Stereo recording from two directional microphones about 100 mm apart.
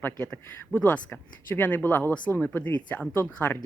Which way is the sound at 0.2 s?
15° left (ahead or behind).